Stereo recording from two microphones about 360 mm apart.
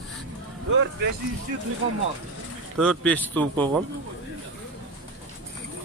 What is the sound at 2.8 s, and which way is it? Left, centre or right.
Speech, centre.